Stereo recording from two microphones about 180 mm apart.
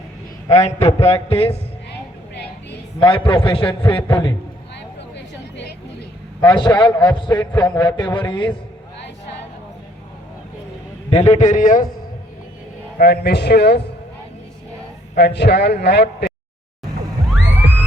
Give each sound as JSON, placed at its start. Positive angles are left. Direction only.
{"t": 0.5, "sound": "speech", "side_deg": 35}
{"t": 1.9, "sound": "vehicle", "side_deg": 70}
{"t": 3.0, "sound": "a man's voice", "side_deg": 30}
{"t": 5.1, "sound": "a sound", "side_deg": 75}
{"t": 6.4, "sound": "a man's voice", "side_deg": 25}
{"t": 11.1, "sound": "a man's voice", "side_deg": 40}
{"t": 13.0, "sound": "a man's voice", "side_deg": 65}
{"t": 15.1, "sound": "a man's voice", "side_deg": 65}